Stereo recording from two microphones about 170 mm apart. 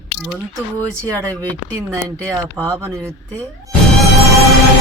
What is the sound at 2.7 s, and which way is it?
Speech, 15° right (ahead or behind).